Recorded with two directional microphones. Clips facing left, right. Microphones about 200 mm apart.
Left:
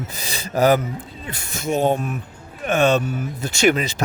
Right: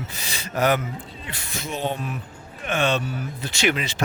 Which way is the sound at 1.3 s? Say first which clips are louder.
Left 9 dB; 45° left (ahead or behind).